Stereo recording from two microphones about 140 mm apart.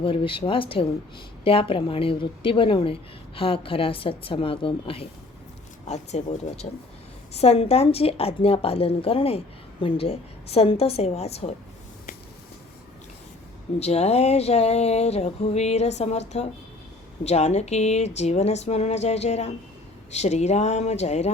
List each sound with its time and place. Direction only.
0.0 s a woman's voice: 40° left (ahead or behind)
5.8 s speech: 55° left (ahead or behind)
13.7 s speech: 50° left (ahead or behind)